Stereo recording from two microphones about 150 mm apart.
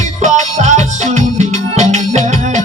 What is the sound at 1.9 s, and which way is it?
Music, 50° right (ahead or behind).